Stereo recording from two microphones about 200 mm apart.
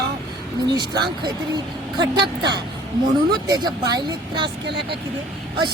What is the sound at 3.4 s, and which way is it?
Speech, 20° right (ahead or behind).